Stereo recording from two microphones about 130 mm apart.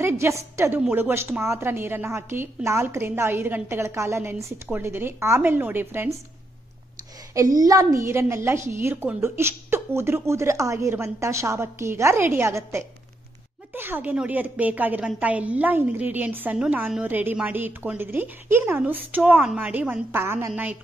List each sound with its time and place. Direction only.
0.0 s a woman's voice: 20° right (ahead or behind)
7.3 s a woman's voice: 25° right (ahead or behind)